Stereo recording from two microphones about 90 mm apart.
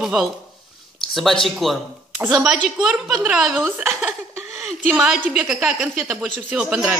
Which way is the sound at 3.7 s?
25° right (ahead or behind).